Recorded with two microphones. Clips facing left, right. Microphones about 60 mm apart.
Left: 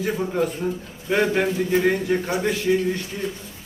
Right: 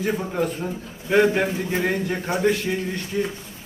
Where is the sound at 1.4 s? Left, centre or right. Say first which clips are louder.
Left 3 dB; right.